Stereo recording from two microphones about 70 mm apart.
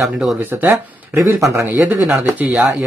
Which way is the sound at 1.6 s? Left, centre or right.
Right.